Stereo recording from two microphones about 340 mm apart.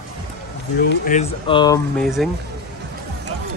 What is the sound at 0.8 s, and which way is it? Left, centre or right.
Speech, left.